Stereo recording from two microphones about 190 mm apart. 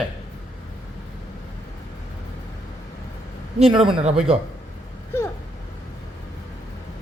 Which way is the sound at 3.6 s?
30° right (ahead or behind).